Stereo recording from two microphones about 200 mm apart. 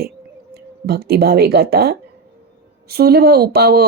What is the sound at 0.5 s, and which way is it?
Speech, 50° right (ahead or behind).